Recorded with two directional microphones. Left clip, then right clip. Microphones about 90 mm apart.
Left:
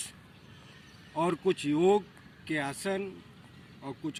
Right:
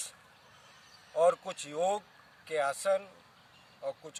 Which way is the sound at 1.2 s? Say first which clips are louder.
Right 2 dB; 60° right (ahead or behind).